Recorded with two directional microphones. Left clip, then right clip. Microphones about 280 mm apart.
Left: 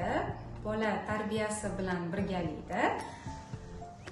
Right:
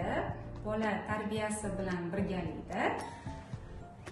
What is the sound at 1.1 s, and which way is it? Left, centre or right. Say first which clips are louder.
A woman's voice: left 2 dB; centre.